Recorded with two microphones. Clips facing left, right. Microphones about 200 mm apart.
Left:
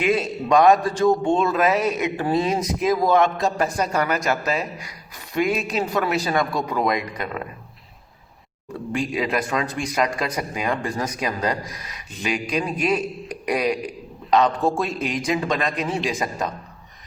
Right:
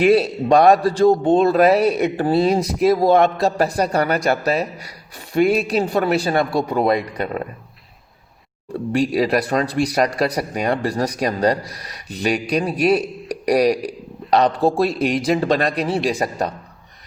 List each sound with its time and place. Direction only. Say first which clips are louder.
0.0 s a man's voice: right 7 dB; 35° right (ahead or behind)
8.7 s a man's voice: right 6 dB; 35° right (ahead or behind)